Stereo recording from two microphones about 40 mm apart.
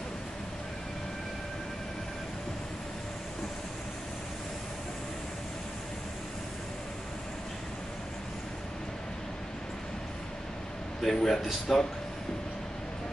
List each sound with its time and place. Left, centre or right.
11.0 s a man's voice: centre